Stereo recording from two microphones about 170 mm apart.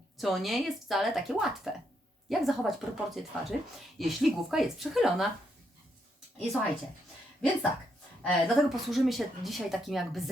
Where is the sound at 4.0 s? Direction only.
Centre (ahead or behind).